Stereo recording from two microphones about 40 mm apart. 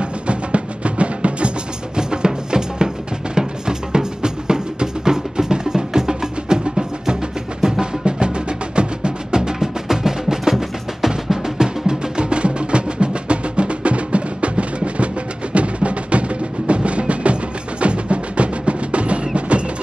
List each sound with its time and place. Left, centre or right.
0.0 s music: right
2.0 s music: right